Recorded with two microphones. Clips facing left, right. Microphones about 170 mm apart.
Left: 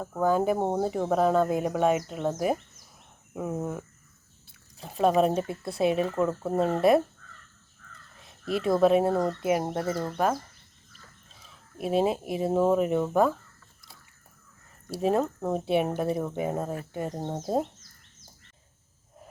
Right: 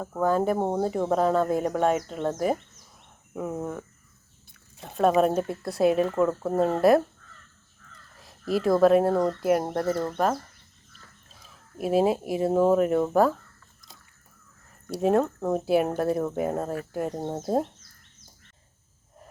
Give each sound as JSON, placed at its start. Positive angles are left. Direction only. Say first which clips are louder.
{"t": 0.0, "sound": "speech", "louder": "right 1 dB", "side_deg": 0}
{"t": 8.2, "sound": "speech", "louder": "right 3 dB", "side_deg": 0}
{"t": 11.8, "sound": "speech", "louder": "right 3 dB", "side_deg": 0}
{"t": 15.0, "sound": "speech", "louder": "right 3 dB", "side_deg": 0}